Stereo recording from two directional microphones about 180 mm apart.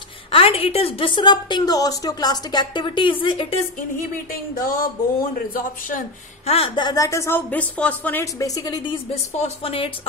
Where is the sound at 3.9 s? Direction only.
50° left (ahead or behind).